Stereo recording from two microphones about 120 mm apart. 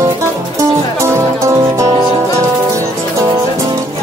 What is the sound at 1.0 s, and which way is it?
Music, 25° right (ahead or behind).